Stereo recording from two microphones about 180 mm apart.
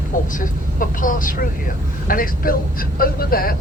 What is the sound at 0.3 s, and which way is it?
Speech, 50° left (ahead or behind).